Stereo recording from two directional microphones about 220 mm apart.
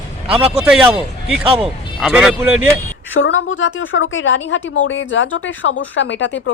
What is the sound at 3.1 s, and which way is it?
Speech, 60° left (ahead or behind).